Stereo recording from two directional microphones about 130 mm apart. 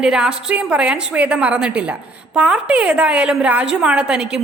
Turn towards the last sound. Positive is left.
turn(degrees=-5)  # may be behind; listen again after turning